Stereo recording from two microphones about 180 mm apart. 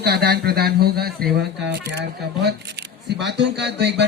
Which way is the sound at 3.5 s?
70° right (ahead or behind).